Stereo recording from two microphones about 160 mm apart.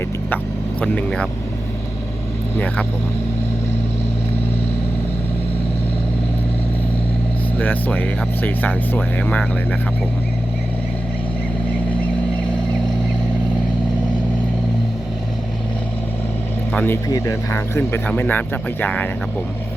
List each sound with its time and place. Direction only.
0.8 s speech: 5° left (ahead or behind)
7.6 s speech: 10° left (ahead or behind)
16.7 s speech: 10° left (ahead or behind)